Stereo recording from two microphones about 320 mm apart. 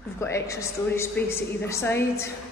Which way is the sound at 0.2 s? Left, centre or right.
Centre.